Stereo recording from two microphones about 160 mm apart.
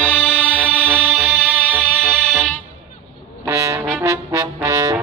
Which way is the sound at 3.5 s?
20° right (ahead or behind).